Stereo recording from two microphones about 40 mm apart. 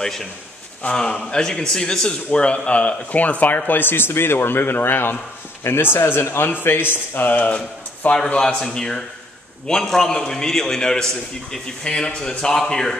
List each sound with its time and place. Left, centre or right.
0.0 s a man's voice: centre
1.3 s a man's voice: centre; by 5.1 s left
5.6 s speech: left
6.5 s a man's voice: left
8.1 s a man's voice: left